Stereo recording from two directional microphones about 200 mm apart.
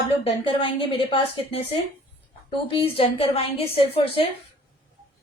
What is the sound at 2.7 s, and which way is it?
A woman's voice, 25° left (ahead or behind).